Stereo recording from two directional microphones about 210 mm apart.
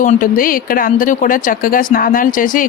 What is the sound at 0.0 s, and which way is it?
Speech, 40° left (ahead or behind).